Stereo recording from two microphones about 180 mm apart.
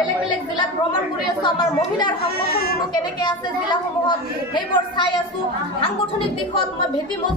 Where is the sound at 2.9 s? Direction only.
25° left (ahead or behind).